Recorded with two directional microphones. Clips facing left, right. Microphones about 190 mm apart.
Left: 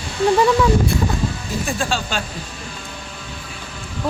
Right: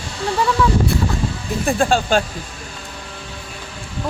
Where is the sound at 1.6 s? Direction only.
55° right (ahead or behind).